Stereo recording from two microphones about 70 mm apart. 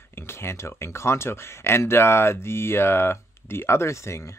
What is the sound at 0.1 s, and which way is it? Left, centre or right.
Speech, left.